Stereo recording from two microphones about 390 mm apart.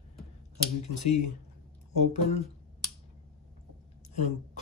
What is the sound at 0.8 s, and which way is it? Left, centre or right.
Speech, centre.